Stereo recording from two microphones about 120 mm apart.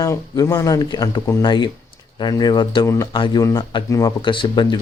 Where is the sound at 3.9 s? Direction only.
25° left (ahead or behind).